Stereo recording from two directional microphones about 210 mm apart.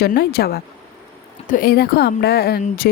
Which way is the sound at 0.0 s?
50° left (ahead or behind).